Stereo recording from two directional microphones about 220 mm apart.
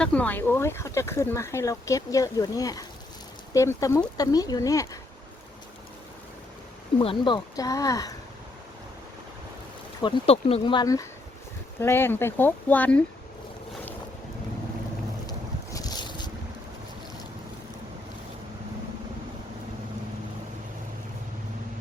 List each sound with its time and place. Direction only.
0.0 s speech: 5° left (ahead or behind)
7.0 s speech: 25° left (ahead or behind)
10.0 s speech: 25° left (ahead or behind); by 13.0 s 5° left (ahead or behind)
15.3 s boat: 15° left (ahead or behind)